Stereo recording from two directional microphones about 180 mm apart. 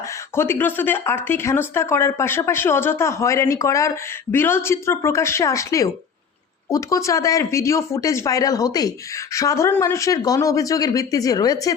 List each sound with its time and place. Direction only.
0.3 s speech: 15° left (ahead or behind)